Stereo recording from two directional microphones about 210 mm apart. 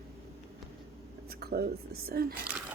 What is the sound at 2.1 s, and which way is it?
Speech, 45° right (ahead or behind).